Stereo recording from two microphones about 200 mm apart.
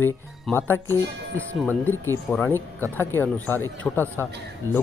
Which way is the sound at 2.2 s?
10° left (ahead or behind).